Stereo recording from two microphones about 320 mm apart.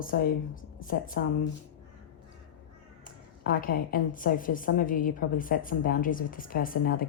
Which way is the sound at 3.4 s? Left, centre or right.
Left.